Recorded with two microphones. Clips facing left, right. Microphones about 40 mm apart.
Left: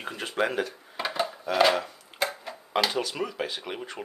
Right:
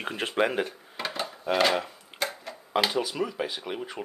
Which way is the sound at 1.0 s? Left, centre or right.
Centre.